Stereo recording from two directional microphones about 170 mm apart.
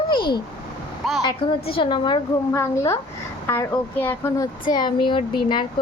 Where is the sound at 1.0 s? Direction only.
Centre (ahead or behind).